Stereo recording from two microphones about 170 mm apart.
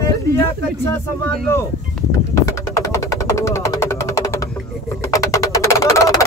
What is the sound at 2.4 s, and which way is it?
Music, 20° left (ahead or behind).